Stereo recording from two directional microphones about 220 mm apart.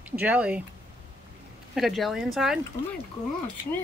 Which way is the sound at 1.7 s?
Centre (ahead or behind).